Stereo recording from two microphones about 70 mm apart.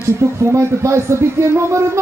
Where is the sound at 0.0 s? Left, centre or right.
Right.